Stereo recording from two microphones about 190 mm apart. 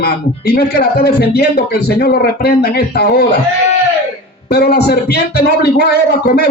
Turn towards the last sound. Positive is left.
turn(degrees=55)  # may be behind; listen again after turning